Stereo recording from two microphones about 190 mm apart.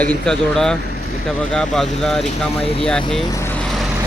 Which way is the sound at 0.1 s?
5° left (ahead or behind).